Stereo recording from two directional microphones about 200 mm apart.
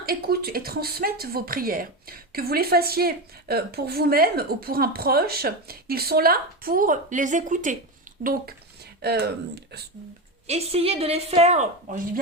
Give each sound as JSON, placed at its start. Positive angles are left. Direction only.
{"t": 0.0, "sound": "speech", "side_deg": -50}
{"t": 10.4, "sound": "a woman's voice", "side_deg": -30}